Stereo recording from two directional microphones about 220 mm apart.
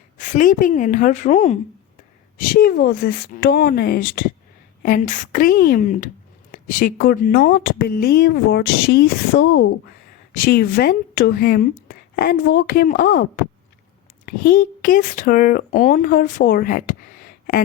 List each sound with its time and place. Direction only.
0.2 s a woman's voice: 35° left (ahead or behind)
2.5 s a woman's voice: 40° left (ahead or behind)